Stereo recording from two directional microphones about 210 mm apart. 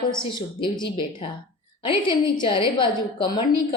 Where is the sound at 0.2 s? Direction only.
20° left (ahead or behind).